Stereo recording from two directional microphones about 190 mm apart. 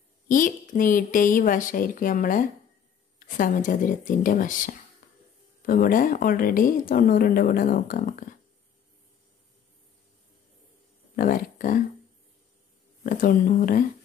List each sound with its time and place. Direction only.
0.3 s speech: 45° left (ahead or behind)
11.1 s speech: 45° left (ahead or behind)
13.0 s speech: 45° left (ahead or behind)